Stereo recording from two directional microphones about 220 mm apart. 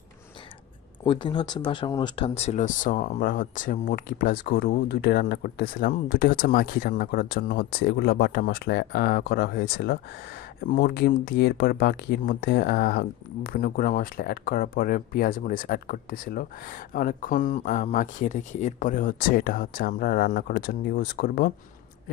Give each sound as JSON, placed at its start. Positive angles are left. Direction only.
{"t": 1.0, "sound": "speech", "side_deg": 20}